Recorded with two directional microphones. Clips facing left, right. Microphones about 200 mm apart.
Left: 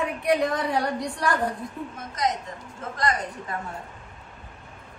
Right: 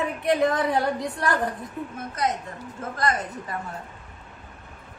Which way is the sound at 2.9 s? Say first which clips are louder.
Right 1 dB; 55° right (ahead or behind).